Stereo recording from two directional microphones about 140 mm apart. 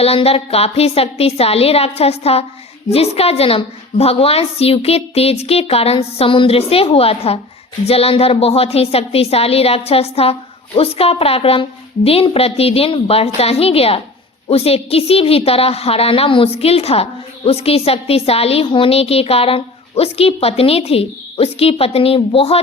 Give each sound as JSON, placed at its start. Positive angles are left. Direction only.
{"t": 0.0, "sound": "a woman's voice", "side_deg": 45}